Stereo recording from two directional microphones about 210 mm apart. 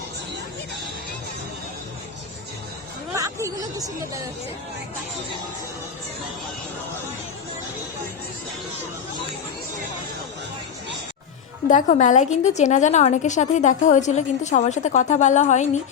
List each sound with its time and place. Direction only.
3.2 s speech: 15° right (ahead or behind)
11.7 s a woman's voice: 35° left (ahead or behind)